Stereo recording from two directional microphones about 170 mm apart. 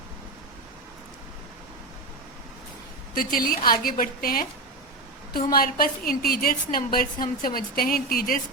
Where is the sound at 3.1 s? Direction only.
55° left (ahead or behind).